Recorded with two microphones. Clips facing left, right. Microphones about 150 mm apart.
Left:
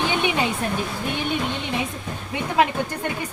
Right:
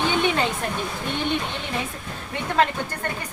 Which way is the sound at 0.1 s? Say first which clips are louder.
Right 1 dB; 15° left (ahead or behind).